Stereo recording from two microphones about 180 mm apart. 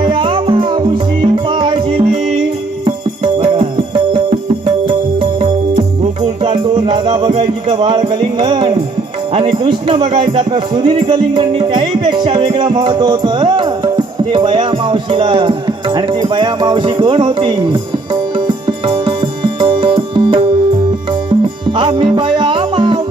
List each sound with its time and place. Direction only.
0.0 s music: 30° right (ahead or behind)
4.8 s music: 30° right (ahead or behind)
21.7 s music: 30° right (ahead or behind)